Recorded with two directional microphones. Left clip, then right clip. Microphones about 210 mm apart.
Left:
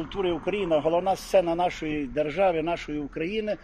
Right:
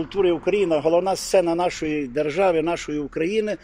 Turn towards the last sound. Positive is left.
turn(degrees=-55)  # may be behind; listen again after turning